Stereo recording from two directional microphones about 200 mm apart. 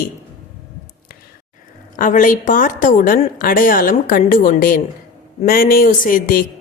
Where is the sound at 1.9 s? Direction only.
40° left (ahead or behind).